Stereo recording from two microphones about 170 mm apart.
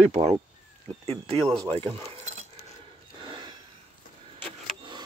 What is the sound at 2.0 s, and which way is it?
Keys jangling, 40° right (ahead or behind).